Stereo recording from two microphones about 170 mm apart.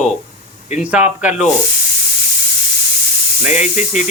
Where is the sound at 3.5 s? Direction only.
45° left (ahead or behind).